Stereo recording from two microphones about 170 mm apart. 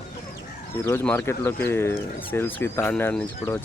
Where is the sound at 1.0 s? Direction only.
10° left (ahead or behind).